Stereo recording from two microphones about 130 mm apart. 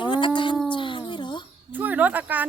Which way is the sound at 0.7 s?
40° left (ahead or behind).